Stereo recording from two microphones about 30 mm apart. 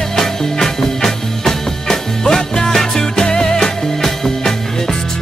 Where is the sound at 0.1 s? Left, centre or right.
Centre.